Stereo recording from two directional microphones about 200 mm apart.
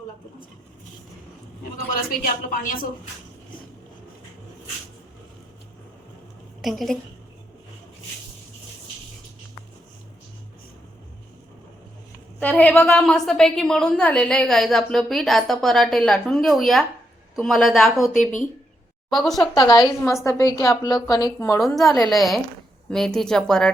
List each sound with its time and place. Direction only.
1.9 s speech: 45° left (ahead or behind)
6.6 s a woman's voice: centre (ahead or behind)
12.4 s a woman's voice: 5° left (ahead or behind)
19.1 s a woman's voice: centre (ahead or behind)
19.5 s a woman's voice: 20° left (ahead or behind)
21.6 s a woman's voice: centre (ahead or behind)